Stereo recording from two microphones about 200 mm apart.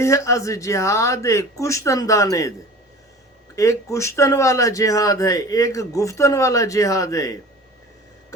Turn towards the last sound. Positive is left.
turn(degrees=15)  # may be behind; listen again after turning